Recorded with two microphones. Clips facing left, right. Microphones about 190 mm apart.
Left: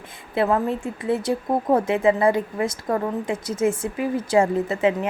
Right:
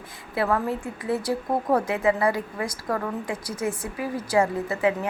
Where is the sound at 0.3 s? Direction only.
20° left (ahead or behind).